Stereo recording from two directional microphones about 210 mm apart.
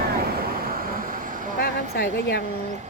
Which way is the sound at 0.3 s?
45° right (ahead or behind).